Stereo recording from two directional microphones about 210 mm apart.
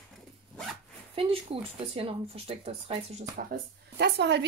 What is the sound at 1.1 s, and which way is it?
Speech, 25° right (ahead or behind).